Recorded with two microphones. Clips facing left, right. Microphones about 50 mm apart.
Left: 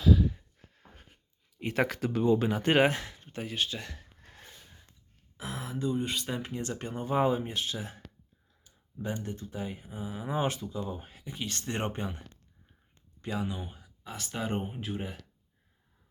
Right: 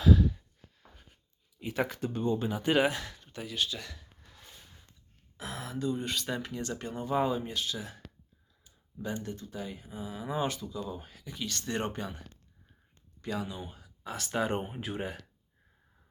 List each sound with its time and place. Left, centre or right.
0.0 s a sound: centre
0.7 s a sound: left
1.5 s speech: left
2.0 s speech: left
3.0 s speech: left
4.2 s a sound: left
5.4 s speech: centre
6.4 s speech: left
13.2 s speech: left
13.7 s speech: centre